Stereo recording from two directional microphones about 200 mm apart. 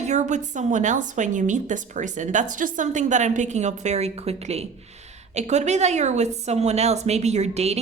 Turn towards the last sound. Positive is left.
turn(degrees=-35)  # may be behind; listen again after turning